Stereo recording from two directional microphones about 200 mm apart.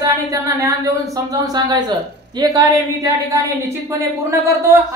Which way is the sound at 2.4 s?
20° right (ahead or behind).